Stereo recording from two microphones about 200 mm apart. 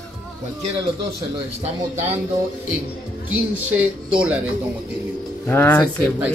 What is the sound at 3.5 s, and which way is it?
Speech, 10° right (ahead or behind).